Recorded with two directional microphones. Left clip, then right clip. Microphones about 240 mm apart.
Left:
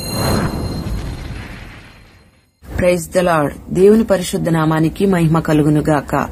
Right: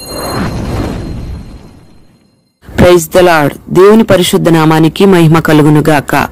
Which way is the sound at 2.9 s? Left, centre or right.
Right.